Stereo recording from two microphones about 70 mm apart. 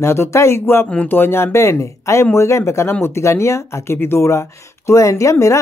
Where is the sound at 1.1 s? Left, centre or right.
Left.